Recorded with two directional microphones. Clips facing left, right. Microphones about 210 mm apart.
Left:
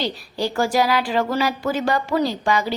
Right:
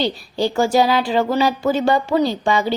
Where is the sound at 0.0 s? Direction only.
25° right (ahead or behind).